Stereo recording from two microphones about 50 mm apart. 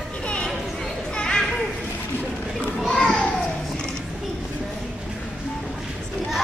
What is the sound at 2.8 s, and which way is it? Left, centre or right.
Children playing, centre.